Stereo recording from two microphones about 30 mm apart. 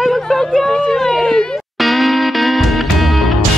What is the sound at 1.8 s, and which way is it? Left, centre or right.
Music, centre.